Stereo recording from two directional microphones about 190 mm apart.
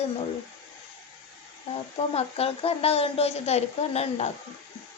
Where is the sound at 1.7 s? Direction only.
30° left (ahead or behind).